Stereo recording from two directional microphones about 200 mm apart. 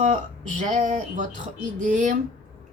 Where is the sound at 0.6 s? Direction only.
40° right (ahead or behind).